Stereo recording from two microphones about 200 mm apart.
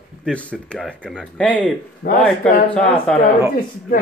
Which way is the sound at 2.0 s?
50° left (ahead or behind).